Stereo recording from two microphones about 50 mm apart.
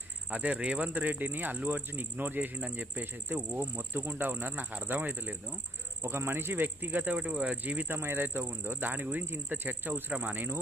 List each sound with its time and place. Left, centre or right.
0.3 s speech: right
3.5 s speech: right
4.2 s speech: right
6.0 s speech: right
7.2 s speech: right
7.9 s speech: right